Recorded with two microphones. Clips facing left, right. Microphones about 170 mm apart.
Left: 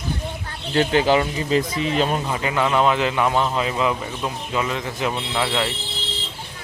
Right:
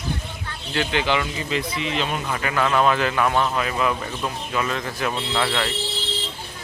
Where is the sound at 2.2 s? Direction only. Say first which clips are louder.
Left 1 dB; 20° left (ahead or behind).